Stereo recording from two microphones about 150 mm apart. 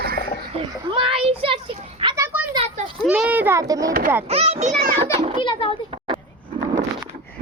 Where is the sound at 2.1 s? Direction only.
15° right (ahead or behind).